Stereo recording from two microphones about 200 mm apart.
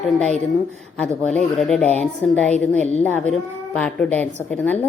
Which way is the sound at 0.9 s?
5° left (ahead or behind).